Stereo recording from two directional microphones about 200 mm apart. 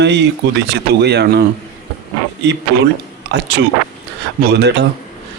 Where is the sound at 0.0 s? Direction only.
60° right (ahead or behind).